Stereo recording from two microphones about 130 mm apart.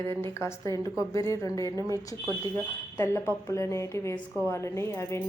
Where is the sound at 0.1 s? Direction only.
20° left (ahead or behind).